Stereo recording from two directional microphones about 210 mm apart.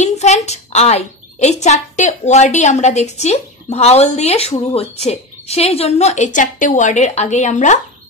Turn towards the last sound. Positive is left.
turn(degrees=35)  # may be behind; listen again after turning